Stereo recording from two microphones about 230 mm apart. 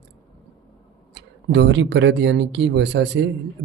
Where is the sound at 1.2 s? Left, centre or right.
Right.